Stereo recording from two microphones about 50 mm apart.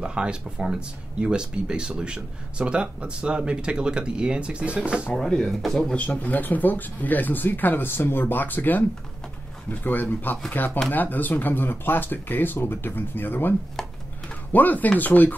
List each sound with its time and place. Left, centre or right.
0.0 s speech: centre
5.5 s speech: centre
5.9 s speech: left
13.8 s a sound: centre
14.5 s speech: left